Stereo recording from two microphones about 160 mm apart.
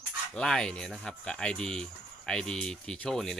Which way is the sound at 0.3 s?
5° left (ahead or behind).